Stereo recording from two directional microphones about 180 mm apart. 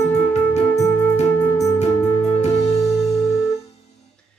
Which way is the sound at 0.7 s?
10° left (ahead or behind).